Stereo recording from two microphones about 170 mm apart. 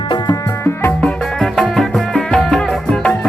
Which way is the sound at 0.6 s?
15° left (ahead or behind).